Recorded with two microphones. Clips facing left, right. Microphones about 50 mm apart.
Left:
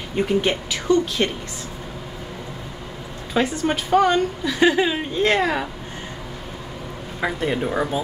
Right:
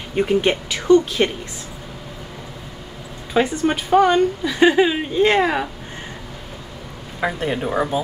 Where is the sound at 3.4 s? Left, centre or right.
Centre.